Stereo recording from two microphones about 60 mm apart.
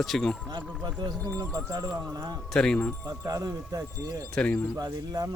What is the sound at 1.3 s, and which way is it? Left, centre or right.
Speech, right.